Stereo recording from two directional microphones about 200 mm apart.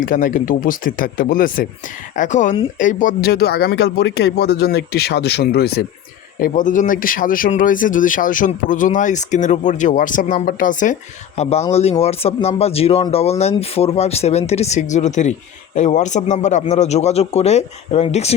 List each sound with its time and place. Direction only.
0.0 s speech: 45° left (ahead or behind)
6.4 s speech: 40° left (ahead or behind)